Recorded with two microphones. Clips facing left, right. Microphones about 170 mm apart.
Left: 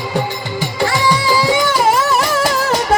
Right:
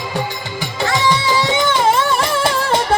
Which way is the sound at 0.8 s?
20° right (ahead or behind).